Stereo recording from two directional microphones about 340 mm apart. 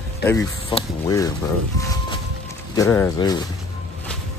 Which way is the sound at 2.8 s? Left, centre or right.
Centre.